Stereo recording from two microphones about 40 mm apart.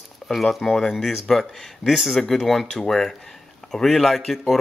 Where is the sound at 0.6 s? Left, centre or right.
Centre.